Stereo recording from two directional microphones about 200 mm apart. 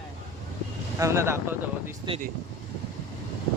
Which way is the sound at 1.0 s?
15° right (ahead or behind).